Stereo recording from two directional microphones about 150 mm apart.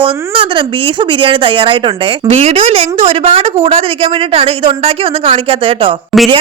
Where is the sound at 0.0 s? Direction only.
35° right (ahead or behind).